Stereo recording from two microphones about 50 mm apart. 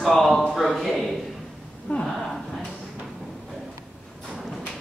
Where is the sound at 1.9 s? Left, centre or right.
Left.